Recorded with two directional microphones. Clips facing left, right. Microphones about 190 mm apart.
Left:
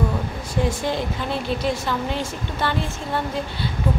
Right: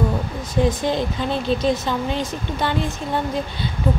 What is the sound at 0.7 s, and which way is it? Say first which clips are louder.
Speech: right 3 dB; 20° right (ahead or behind).